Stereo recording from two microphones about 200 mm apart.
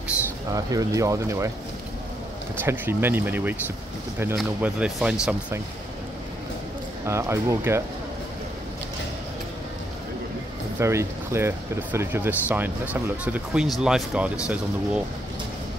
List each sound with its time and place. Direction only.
0.6 s speech: 15° right (ahead or behind)
2.6 s speech: 10° right (ahead or behind)
7.1 s speech: 15° right (ahead or behind)
10.8 s speech: 15° right (ahead or behind)